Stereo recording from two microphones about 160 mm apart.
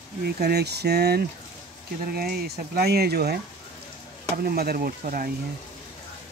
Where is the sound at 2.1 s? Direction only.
70° right (ahead or behind).